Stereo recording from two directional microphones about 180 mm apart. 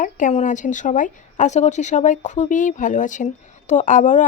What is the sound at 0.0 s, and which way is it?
A woman's voice, 45° left (ahead or behind).